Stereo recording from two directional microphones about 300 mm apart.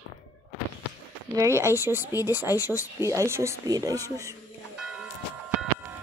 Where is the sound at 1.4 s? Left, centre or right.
Centre.